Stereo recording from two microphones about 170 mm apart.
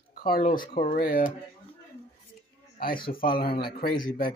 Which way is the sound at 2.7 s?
60° left (ahead or behind).